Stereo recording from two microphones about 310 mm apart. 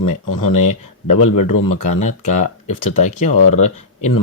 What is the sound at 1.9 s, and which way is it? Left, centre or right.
Speech, left.